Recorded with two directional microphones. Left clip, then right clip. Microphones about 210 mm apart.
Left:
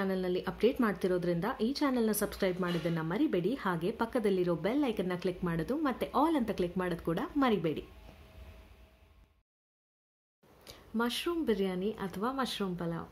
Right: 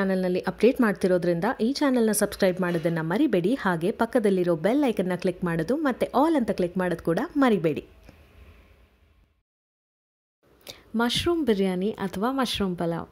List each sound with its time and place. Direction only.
0.0 s speech: 35° right (ahead or behind)
10.6 s speech: 40° right (ahead or behind)